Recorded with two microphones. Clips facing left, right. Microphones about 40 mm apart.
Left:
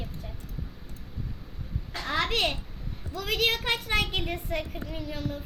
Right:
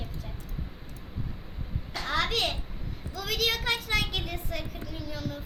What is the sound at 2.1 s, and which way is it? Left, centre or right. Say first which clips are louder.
A woman's voice: left 1 dB; centre.